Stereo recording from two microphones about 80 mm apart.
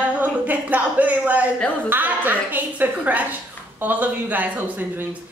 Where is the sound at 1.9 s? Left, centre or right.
Right.